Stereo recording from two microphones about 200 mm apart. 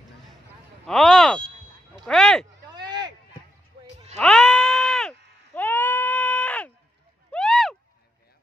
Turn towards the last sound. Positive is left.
turn(degrees=0)  # may be behind; listen again after turning